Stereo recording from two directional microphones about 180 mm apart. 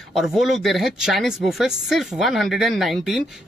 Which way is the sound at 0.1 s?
Centre (ahead or behind).